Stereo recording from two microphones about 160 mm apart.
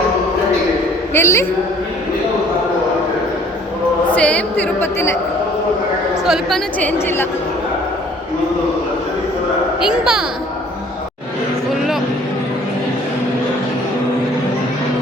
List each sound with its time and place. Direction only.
1.1 s a woman's voice: 15° left (ahead or behind)
4.1 s a woman's voice: 10° left (ahead or behind)
6.2 s speech: centre (ahead or behind)
6.7 s a woman's voice: 10° left (ahead or behind)
9.8 s speech: 5° right (ahead or behind)